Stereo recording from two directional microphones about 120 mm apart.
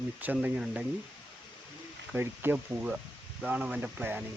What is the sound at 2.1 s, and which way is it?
Speech, 15° right (ahead or behind).